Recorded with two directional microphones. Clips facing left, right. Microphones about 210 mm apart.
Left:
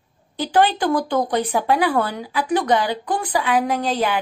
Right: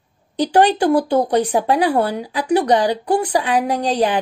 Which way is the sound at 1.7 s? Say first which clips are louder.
Right 2 dB; 35° right (ahead or behind).